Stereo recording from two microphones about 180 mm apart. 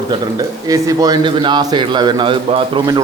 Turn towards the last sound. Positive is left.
turn(degrees=-25)  # may be behind; listen again after turning